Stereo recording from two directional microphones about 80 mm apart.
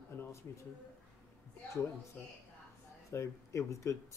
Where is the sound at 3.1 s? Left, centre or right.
Left.